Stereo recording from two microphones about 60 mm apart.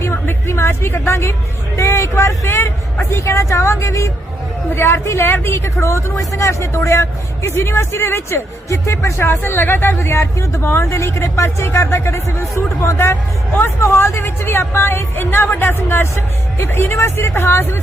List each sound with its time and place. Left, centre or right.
0.0 s speech: left
4.7 s speech: left